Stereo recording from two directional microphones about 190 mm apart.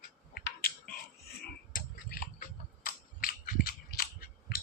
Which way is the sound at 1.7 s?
50° left (ahead or behind).